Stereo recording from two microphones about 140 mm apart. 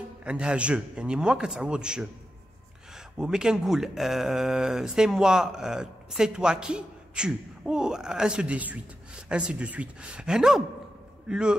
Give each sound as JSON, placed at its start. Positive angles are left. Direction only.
{"t": 0.2, "sound": "a man's voice", "side_deg": -5}